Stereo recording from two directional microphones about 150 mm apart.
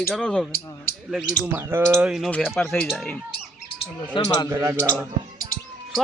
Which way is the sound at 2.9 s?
5° left (ahead or behind).